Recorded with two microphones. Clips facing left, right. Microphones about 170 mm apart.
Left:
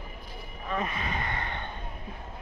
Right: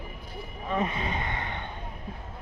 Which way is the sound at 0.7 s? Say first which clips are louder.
Right 3 dB; 25° right (ahead or behind).